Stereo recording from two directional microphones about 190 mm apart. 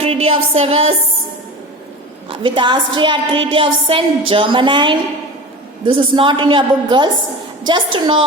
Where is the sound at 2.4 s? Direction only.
25° right (ahead or behind).